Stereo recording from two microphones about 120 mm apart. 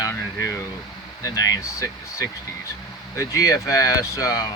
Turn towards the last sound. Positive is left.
turn(degrees=30)  # may be behind; listen again after turning